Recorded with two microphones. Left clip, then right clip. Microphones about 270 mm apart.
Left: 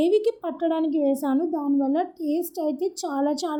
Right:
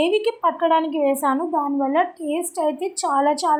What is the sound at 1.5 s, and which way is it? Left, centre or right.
Speech, right.